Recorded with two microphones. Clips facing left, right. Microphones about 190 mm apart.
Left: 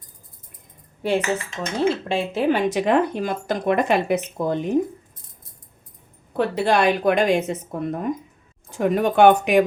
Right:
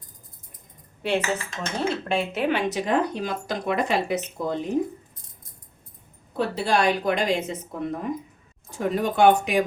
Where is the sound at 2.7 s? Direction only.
55° left (ahead or behind).